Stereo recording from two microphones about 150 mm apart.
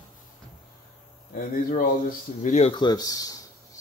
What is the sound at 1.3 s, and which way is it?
Speech, 70° left (ahead or behind).